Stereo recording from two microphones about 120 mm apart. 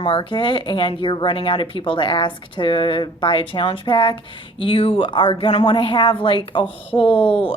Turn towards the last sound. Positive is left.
turn(degrees=50)  # may be behind; listen again after turning